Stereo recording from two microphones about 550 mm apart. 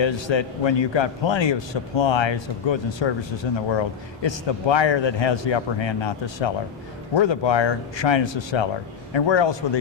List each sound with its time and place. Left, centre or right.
0.0 s a man's voice: left